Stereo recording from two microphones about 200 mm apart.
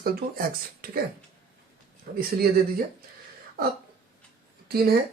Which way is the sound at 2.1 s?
50° right (ahead or behind).